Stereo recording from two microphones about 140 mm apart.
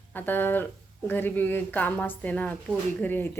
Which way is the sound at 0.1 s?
15° left (ahead or behind).